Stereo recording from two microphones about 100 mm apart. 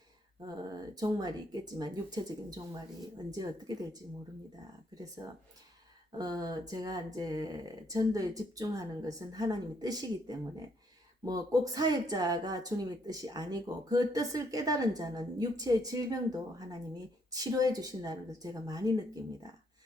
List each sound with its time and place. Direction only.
0.4 s speech: 40° right (ahead or behind)
5.2 s speech: 45° right (ahead or behind)